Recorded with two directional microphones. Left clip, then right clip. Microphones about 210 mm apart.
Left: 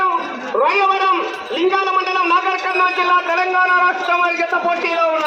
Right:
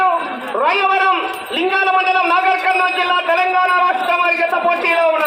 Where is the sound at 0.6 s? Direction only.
50° right (ahead or behind); by 4.9 s 30° right (ahead or behind).